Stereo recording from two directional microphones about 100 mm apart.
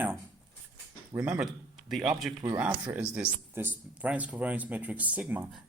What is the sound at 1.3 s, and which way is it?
Speech, 5° right (ahead or behind).